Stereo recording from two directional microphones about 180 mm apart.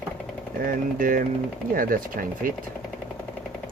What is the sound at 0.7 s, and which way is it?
Speech, 50° right (ahead or behind).